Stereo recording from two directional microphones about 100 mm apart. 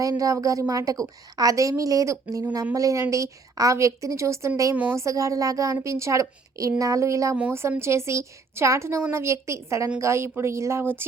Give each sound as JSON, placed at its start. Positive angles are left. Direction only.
{"t": 0.0, "sound": "a woman's voice", "side_deg": -35}
{"t": 4.7, "sound": "a woman's voice", "side_deg": -20}